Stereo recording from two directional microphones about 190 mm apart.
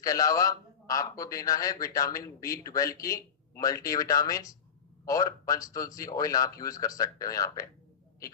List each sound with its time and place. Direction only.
0.0 s a man's voice: 20° left (ahead or behind)